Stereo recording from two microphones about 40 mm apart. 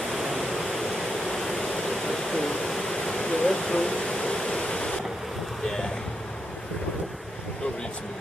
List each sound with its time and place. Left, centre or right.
0.1 s waterfall: centre
4.6 s waves: left